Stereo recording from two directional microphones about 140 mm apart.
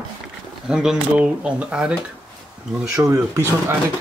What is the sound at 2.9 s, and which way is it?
Speech, 20° right (ahead or behind).